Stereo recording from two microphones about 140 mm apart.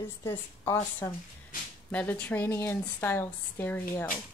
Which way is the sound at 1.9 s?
10° left (ahead or behind).